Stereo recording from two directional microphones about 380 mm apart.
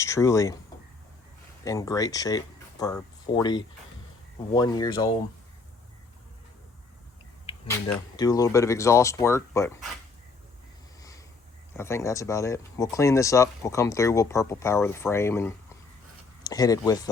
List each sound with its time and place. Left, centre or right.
0.0 s speech: centre
1.6 s speech: centre
8.1 s speech: centre
11.8 s speech: centre